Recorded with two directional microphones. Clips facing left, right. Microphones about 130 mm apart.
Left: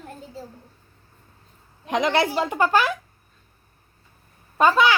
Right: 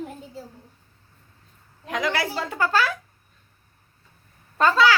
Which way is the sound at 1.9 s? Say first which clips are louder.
Left 5 dB; 20° left (ahead or behind).